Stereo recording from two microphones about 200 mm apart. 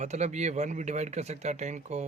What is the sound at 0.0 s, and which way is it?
Speech, 35° right (ahead or behind).